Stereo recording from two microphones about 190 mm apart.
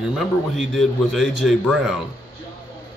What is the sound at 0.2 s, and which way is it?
A man's voice, centre (ahead or behind).